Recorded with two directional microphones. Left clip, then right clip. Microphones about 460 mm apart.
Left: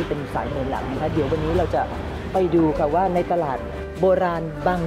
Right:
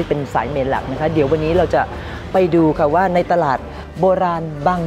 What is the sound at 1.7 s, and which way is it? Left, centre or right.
Speech, right.